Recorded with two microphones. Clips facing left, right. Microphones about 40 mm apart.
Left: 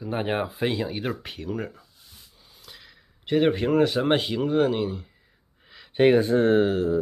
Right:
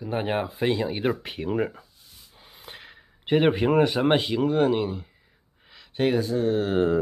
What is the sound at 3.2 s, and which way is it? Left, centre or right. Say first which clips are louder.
Speech: right 1 dB; right.